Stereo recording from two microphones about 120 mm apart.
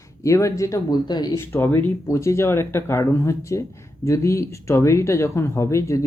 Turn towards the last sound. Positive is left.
turn(degrees=25)  # may be behind; listen again after turning